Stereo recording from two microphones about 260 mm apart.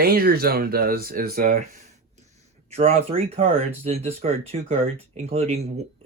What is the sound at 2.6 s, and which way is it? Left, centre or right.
Speech, right.